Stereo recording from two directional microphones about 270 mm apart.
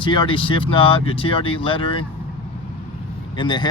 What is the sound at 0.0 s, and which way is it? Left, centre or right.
Speech, centre.